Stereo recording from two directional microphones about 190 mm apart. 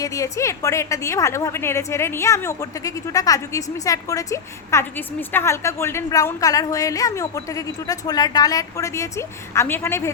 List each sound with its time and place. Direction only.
0.0 s a woman's voice: 15° left (ahead or behind)